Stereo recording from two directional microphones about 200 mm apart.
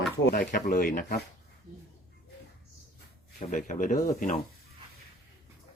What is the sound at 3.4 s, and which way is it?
Speech, 40° left (ahead or behind).